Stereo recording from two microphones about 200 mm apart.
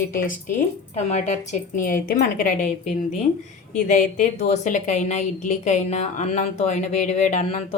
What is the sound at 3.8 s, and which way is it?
A woman's voice, 40° left (ahead or behind).